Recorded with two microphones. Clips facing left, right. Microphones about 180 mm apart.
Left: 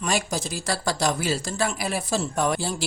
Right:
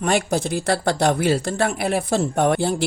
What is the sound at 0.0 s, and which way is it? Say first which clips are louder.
Speech: right 6 dB; 60° right (ahead or behind).